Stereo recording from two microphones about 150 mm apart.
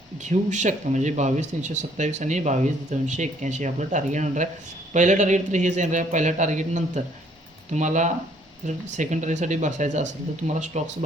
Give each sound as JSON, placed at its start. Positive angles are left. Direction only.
{"t": 0.3, "sound": "speech", "side_deg": -55}